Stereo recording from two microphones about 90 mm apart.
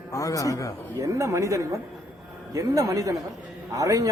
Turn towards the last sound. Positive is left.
turn(degrees=-40)  # may be behind; listen again after turning